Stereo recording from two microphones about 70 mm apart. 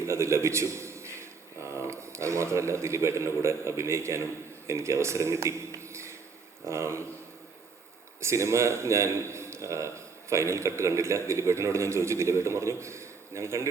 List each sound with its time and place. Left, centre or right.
0.0 s a man's voice: right
8.2 s a man's voice: right